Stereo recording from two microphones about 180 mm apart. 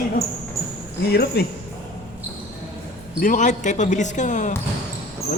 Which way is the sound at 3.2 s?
45° left (ahead or behind).